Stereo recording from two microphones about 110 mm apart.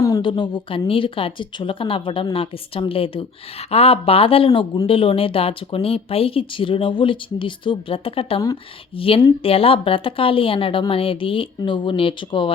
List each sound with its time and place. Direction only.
0.2 s speech: 45° left (ahead or behind)